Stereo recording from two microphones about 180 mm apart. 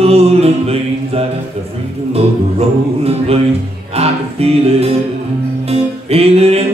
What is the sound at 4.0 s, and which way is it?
Music, 35° right (ahead or behind).